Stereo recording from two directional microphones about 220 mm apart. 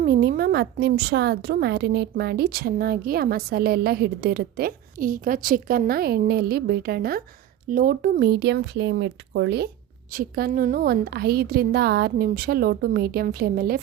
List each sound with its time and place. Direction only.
0.0 s a woman's voice: 45° right (ahead or behind)
10.1 s a woman's voice: 40° right (ahead or behind)